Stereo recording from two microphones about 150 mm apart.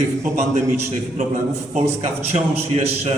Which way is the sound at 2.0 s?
45° right (ahead or behind).